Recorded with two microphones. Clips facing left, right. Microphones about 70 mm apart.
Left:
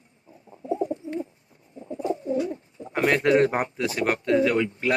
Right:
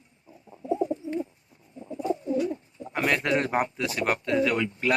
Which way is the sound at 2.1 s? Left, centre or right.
Left.